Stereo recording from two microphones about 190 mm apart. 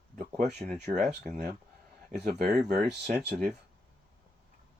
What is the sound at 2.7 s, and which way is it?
Speech, 35° right (ahead or behind).